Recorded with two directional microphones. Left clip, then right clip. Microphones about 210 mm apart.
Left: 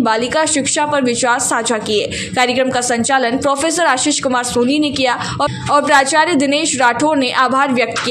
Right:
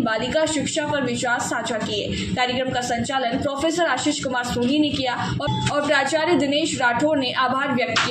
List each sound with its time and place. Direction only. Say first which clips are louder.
0.0 s speech: left 7 dB; 50° left (ahead or behind)